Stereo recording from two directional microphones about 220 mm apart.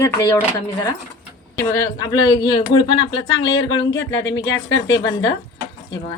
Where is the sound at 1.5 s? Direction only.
15° left (ahead or behind).